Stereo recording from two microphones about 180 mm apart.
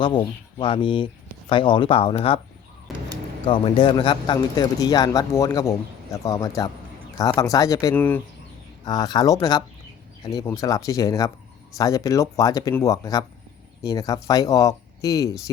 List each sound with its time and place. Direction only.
0.0 s speech: 25° left (ahead or behind)
2.9 s a sound: centre (ahead or behind)
3.4 s speech: 30° left (ahead or behind); by 8.2 s 10° left (ahead or behind)
8.8 s speech: 20° left (ahead or behind)